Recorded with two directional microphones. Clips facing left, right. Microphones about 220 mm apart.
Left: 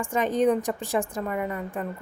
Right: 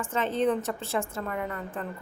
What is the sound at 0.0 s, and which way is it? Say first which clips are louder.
A woman's voice: left 4 dB; 15° left (ahead or behind).